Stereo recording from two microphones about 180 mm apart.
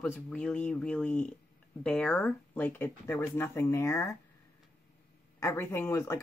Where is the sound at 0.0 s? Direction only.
5° left (ahead or behind).